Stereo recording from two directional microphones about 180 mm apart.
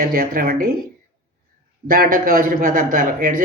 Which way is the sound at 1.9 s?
50° right (ahead or behind).